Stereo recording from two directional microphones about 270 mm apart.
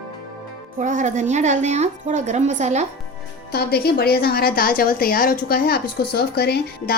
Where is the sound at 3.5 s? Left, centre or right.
Left.